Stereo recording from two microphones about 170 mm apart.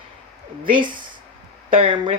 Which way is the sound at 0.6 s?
30° right (ahead or behind).